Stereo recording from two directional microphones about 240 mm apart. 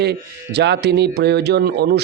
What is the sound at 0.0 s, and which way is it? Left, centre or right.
A man's voice, right.